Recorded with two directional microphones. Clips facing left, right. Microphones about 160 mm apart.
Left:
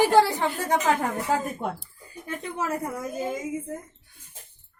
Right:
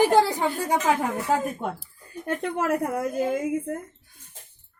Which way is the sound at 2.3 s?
60° right (ahead or behind).